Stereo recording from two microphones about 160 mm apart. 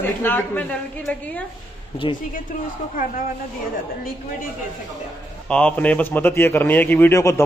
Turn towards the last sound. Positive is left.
turn(degrees=15)  # may be behind; listen again after turning